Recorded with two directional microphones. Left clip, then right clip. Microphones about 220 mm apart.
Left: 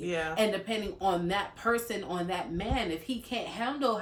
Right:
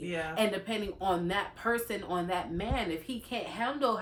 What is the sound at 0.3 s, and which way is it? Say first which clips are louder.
Speech: even; centre (ahead or behind).